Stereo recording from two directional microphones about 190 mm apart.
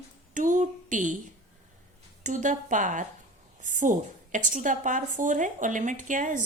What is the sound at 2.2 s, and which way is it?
A woman's voice, 40° right (ahead or behind).